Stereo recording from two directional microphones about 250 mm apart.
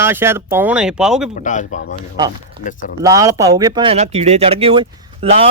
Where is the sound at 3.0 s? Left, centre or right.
Centre.